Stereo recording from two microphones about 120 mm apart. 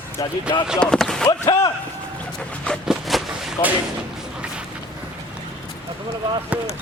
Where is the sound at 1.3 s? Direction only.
35° left (ahead or behind).